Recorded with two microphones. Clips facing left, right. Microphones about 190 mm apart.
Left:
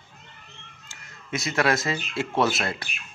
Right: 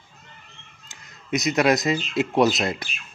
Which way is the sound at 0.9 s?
20° right (ahead or behind).